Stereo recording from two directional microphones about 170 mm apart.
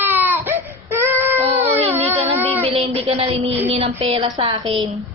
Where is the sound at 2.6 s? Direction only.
35° right (ahead or behind).